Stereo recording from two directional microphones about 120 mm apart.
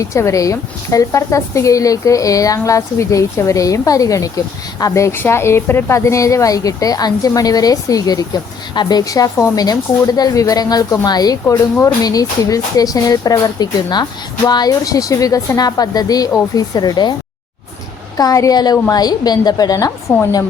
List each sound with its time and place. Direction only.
0.0 s a woman's voice: 25° left (ahead or behind)
18.2 s speech: 30° left (ahead or behind)